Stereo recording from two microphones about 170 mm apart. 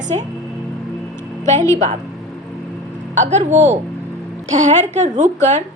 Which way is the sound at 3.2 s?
45° right (ahead or behind).